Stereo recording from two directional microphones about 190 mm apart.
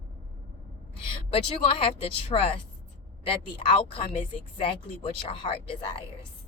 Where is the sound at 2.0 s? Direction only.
30° left (ahead or behind).